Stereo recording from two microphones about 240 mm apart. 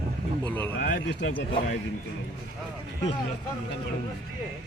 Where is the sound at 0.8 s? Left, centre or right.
Left.